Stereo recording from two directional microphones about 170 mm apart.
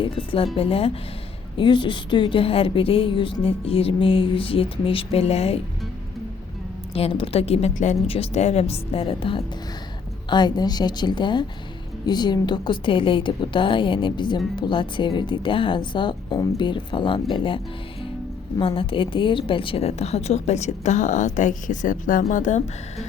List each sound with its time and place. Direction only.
0.0 s a woman's voice: 30° left (ahead or behind)
6.9 s a woman's voice: 35° left (ahead or behind)
18.6 s a woman's voice: 30° left (ahead or behind)